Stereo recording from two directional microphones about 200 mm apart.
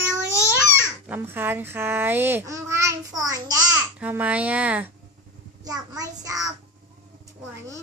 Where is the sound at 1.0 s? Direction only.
10° right (ahead or behind).